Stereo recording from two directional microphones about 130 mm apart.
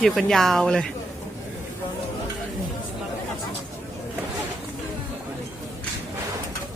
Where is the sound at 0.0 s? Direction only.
5° left (ahead or behind).